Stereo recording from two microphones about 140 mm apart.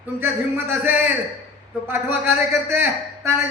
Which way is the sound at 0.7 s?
15° right (ahead or behind).